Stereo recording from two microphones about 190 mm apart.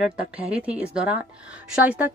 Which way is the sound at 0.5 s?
5° right (ahead or behind).